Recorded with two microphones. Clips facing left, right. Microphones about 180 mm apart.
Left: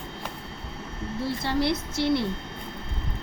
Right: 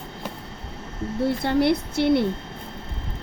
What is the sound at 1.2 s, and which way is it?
A woman's voice, 60° right (ahead or behind).